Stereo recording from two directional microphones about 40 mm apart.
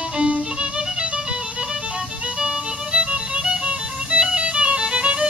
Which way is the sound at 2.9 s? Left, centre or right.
Right.